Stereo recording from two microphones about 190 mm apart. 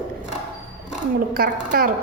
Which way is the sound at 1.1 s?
50° right (ahead or behind).